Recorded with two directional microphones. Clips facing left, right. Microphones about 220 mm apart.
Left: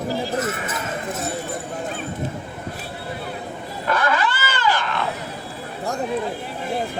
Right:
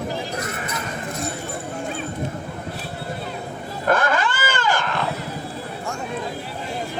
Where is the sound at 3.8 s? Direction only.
50° right (ahead or behind).